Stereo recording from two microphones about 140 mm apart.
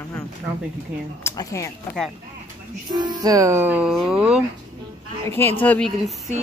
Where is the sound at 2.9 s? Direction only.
30° right (ahead or behind); by 4.4 s 5° right (ahead or behind).